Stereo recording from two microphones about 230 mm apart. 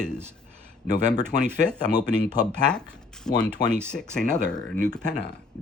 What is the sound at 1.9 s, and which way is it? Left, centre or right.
Speech, centre.